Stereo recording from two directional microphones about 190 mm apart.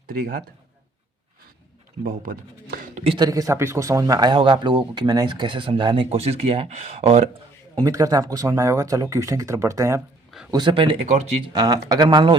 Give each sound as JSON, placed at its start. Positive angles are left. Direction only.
{"t": 0.1, "sound": "a man's voice", "side_deg": -50}
{"t": 2.0, "sound": "a sound", "side_deg": -50}
{"t": 3.0, "sound": "speech", "side_deg": -25}
{"t": 7.8, "sound": "speech", "side_deg": -15}
{"t": 11.5, "sound": "speech", "side_deg": -20}